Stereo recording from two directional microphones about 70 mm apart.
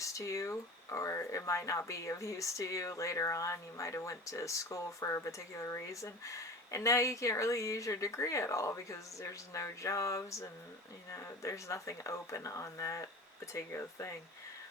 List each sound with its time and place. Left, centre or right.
0.0 s speech: left